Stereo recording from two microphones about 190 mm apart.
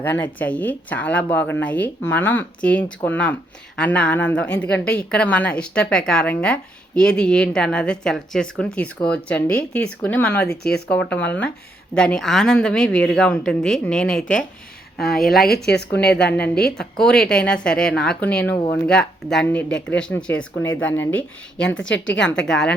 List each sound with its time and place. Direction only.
0.0 s a woman's voice: 10° left (ahead or behind)
10.4 s speech: 55° left (ahead or behind)
10.9 s a woman's voice: 5° left (ahead or behind)
14.9 s speech: 55° left (ahead or behind)
16.7 s a woman's voice: 5° left (ahead or behind)
21.8 s a woman's voice: 80° left
22.2 s a woman's voice: 5° left (ahead or behind)